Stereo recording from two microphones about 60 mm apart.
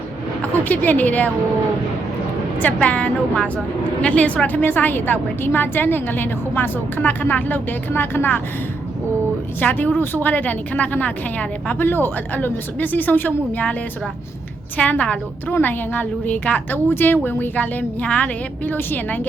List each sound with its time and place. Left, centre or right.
0.6 s a woman's voice: left
2.6 s a woman's voice: left
9.6 s a woman's voice: left
11.9 s a woman's voice: left
14.8 s a woman's voice: left
18.6 s a woman's voice: left